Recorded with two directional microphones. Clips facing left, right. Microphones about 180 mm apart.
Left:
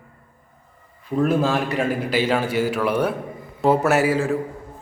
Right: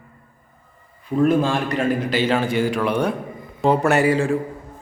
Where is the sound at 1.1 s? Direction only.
Centre (ahead or behind).